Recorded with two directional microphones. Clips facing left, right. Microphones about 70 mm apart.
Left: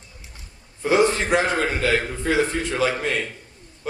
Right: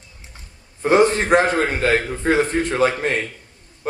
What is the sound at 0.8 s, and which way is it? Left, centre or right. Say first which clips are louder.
A man's voice: right 3 dB; right.